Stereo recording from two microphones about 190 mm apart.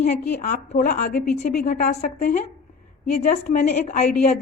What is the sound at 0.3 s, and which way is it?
Speech, 50° left (ahead or behind).